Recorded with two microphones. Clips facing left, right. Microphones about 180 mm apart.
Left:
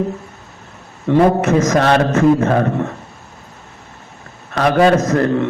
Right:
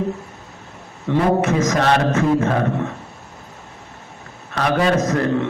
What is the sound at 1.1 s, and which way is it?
Speech, 45° left (ahead or behind).